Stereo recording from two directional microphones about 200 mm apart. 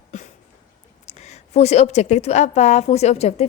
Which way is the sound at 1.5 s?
35° left (ahead or behind).